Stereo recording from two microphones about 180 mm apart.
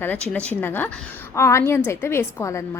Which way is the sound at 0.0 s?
10° left (ahead or behind).